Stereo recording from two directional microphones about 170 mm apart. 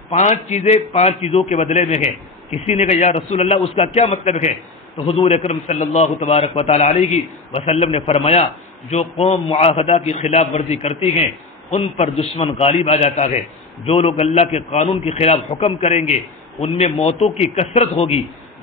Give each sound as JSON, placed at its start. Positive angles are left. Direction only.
{"t": 0.1, "sound": "a man's voice", "side_deg": 45}